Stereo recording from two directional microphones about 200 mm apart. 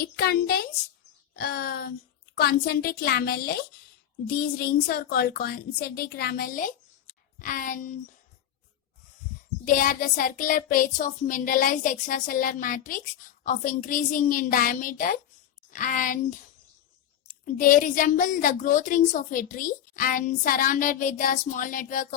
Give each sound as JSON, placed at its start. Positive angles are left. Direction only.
{"t": 0.0, "sound": "a woman's voice", "side_deg": 50}
{"t": 9.6, "sound": "a woman's voice", "side_deg": 45}
{"t": 17.4, "sound": "a woman's voice", "side_deg": 40}